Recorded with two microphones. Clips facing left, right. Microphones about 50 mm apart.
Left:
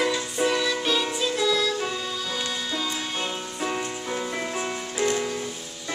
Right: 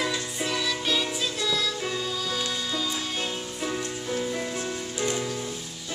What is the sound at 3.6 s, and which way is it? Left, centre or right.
Music, left.